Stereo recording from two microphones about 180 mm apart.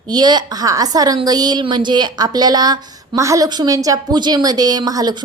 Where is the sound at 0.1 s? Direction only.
25° right (ahead or behind).